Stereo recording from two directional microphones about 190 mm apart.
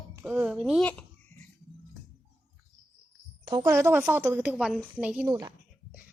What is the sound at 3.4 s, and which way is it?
Speech, 20° right (ahead or behind).